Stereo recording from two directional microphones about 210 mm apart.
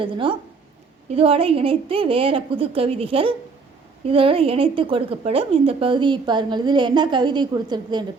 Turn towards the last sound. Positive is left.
turn(degrees=-20)  # may be behind; listen again after turning